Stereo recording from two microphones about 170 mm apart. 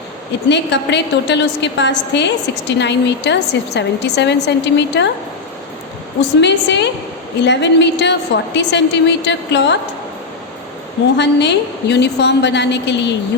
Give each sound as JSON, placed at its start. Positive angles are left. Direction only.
{"t": 0.4, "sound": "a woman's voice", "side_deg": 90}
{"t": 6.4, "sound": "a woman's voice", "side_deg": 90}
{"t": 11.2, "sound": "a woman's voice", "side_deg": 90}